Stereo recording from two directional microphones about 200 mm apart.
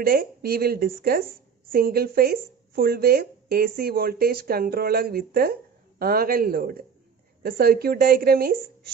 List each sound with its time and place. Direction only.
0.0 s speech: 50° right (ahead or behind)